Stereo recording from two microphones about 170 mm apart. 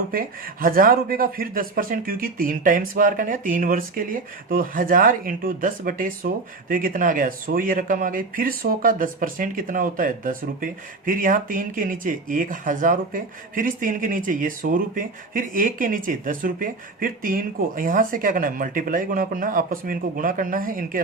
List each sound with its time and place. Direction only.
0.1 s speech: 55° right (ahead or behind)